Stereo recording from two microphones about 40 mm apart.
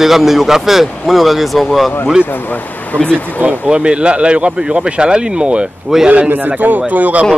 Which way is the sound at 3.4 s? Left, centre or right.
Right.